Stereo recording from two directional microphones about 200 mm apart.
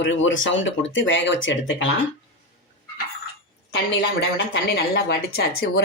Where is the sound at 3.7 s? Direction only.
55° left (ahead or behind).